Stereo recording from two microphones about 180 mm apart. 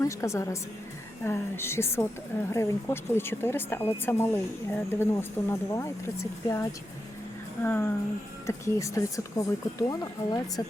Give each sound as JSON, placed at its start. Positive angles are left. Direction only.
{"t": 0.0, "sound": "speech", "side_deg": 15}